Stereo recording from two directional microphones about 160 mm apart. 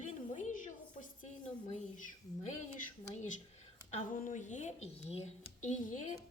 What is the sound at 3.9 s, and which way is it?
A woman's voice, 55° left (ahead or behind).